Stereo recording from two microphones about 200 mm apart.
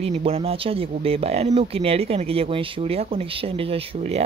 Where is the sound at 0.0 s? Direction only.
30° right (ahead or behind).